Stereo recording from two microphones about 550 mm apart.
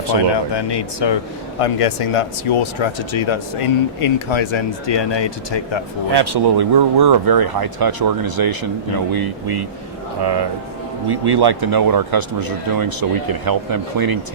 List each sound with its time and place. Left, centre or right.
0.3 s speech: left
1.5 s speech: left
6.1 s speech: right